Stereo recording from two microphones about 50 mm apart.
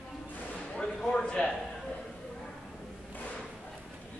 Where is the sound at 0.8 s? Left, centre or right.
Centre.